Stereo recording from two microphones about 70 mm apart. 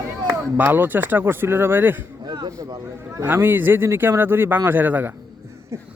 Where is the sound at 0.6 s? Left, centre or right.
Right.